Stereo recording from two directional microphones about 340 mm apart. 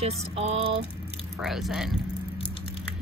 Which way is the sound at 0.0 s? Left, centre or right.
Centre.